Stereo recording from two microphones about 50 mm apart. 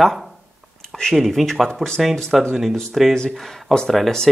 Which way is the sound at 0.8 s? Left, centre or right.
Centre.